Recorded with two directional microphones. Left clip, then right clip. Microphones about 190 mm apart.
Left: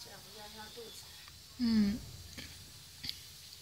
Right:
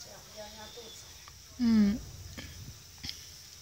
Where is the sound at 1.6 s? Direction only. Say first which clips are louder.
Right 5 dB; 20° right (ahead or behind).